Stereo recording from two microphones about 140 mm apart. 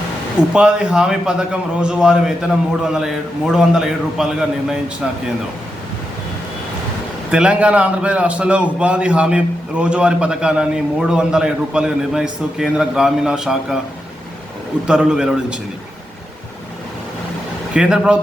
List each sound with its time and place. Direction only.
0.5 s a man's voice: 5° right (ahead or behind)
7.3 s a man's voice: 5° right (ahead or behind)
14.8 s a man's voice: 5° right (ahead or behind)
17.7 s a man's voice: 5° right (ahead or behind)